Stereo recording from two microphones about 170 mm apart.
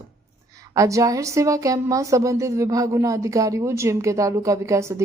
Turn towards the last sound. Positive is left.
turn(degrees=-15)  # may be behind; listen again after turning